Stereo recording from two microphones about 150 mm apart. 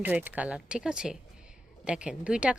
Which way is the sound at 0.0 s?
10° right (ahead or behind).